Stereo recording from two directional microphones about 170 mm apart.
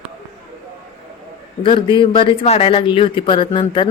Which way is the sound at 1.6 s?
30° left (ahead or behind).